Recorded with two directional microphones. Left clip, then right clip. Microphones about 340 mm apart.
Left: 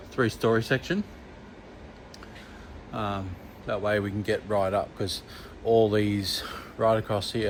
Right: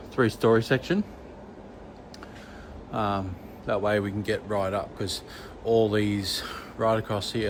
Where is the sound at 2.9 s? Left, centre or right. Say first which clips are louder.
Right 4 dB; centre.